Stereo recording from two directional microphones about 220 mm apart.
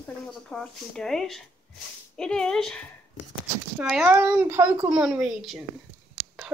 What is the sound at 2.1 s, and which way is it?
Speech, 5° left (ahead or behind).